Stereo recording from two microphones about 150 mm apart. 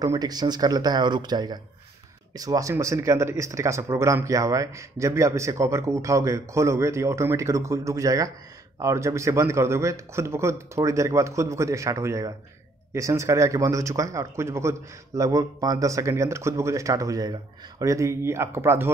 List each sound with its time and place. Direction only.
0.0 s speech: 25° right (ahead or behind)